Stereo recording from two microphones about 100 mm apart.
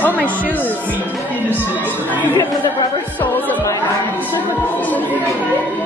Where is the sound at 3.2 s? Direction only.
20° left (ahead or behind).